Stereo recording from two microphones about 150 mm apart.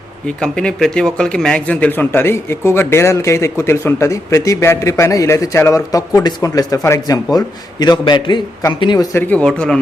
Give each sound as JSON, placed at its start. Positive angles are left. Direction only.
{"t": 0.3, "sound": "speech", "side_deg": 5}
{"t": 9.1, "sound": "speech", "side_deg": 10}